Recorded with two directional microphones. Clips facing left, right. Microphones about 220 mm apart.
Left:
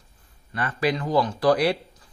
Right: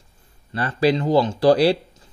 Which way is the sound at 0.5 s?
30° right (ahead or behind).